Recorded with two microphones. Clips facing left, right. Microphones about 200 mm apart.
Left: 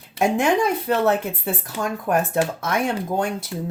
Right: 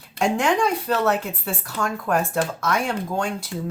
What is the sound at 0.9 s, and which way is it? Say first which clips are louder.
Speech: left 2 dB; 20° left (ahead or behind).